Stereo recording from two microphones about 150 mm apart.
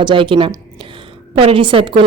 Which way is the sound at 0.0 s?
35° right (ahead or behind).